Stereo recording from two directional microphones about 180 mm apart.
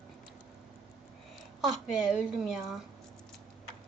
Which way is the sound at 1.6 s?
Centre (ahead or behind).